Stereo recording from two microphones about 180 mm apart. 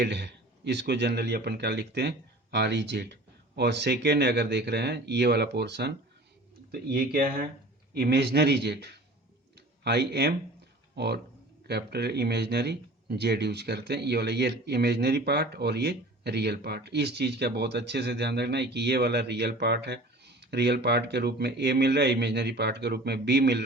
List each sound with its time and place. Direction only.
0.0 s speech: 70° right (ahead or behind)
6.7 s speech: 55° right (ahead or behind)
7.9 s speech: 65° right (ahead or behind)
9.6 s a sound: 65° right (ahead or behind)
10.9 s speech: 65° right (ahead or behind)